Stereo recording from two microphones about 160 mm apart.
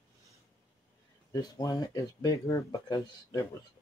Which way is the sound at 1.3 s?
20° left (ahead or behind).